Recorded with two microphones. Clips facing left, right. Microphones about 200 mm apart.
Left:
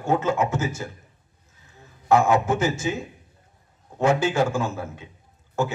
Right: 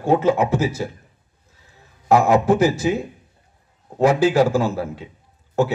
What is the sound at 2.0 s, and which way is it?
A man's voice, 35° right (ahead or behind).